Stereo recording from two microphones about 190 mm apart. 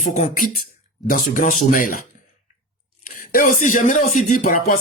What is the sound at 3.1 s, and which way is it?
Speech, 45° left (ahead or behind).